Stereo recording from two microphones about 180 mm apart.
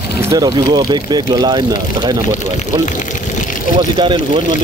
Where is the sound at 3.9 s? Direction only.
25° right (ahead or behind).